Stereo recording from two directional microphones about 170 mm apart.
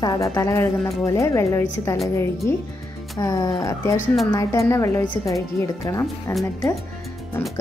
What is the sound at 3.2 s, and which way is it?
A woman's voice, 20° left (ahead or behind).